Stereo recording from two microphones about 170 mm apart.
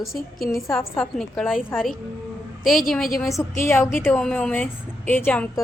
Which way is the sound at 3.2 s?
20° left (ahead or behind).